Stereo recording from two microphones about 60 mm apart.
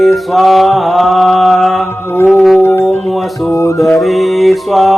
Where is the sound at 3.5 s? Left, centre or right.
Left.